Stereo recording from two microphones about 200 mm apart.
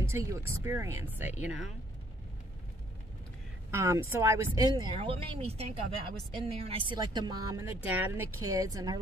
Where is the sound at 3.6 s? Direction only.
15° right (ahead or behind).